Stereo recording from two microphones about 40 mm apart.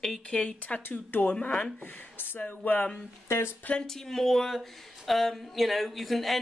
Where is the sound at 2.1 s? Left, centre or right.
Left.